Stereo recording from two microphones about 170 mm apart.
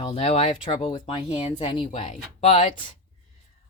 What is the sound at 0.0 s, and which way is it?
Speech, 40° left (ahead or behind).